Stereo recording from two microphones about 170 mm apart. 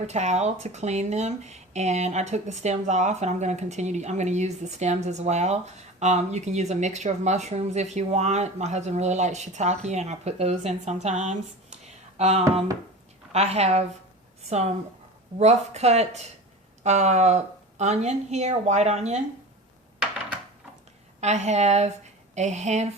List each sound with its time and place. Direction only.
0.1 s speech: 40° right (ahead or behind)
15.4 s speech: 40° right (ahead or behind)
21.2 s speech: 40° right (ahead or behind)